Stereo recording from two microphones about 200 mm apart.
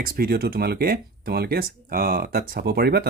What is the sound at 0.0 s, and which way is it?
Speech, 50° right (ahead or behind).